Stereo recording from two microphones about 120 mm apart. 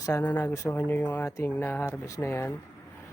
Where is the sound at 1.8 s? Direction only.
25° left (ahead or behind).